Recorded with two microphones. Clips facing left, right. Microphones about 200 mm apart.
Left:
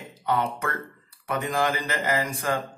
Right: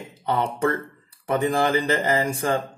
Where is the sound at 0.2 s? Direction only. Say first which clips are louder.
Right 3 dB; 30° right (ahead or behind).